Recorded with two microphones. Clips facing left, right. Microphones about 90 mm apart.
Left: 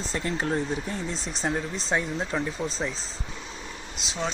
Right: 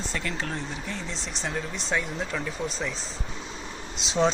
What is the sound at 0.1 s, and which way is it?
Speech, 30° left (ahead or behind).